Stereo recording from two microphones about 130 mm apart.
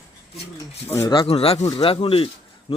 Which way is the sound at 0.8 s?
20° left (ahead or behind).